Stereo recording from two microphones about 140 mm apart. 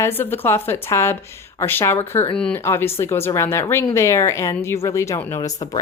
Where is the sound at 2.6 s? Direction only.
20° left (ahead or behind).